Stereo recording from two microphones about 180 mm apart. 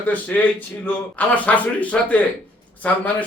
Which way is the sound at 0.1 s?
10° left (ahead or behind).